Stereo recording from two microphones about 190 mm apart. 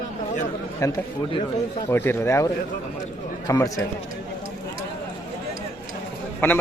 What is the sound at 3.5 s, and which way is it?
Speech, 15° left (ahead or behind).